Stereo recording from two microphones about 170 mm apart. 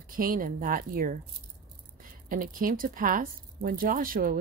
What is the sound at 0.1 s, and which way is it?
Speech, 55° right (ahead or behind).